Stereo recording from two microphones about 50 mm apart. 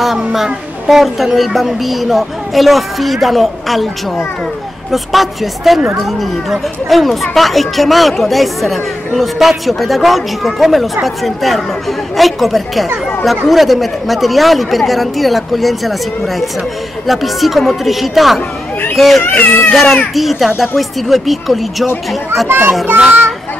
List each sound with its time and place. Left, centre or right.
0.3 s speech: centre
4.9 s speech: centre
17.0 s speech: centre
19.2 s speech: left
19.7 s speech: centre
22.9 s a child's voice: right